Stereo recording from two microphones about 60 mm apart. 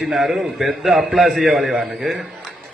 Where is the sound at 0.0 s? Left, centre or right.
Centre.